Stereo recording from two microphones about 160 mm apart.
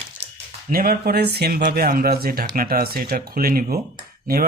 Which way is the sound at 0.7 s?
70° right (ahead or behind).